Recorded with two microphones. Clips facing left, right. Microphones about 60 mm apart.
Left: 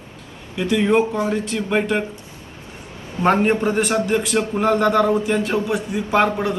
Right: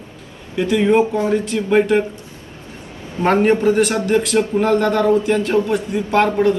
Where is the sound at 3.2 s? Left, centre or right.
Centre.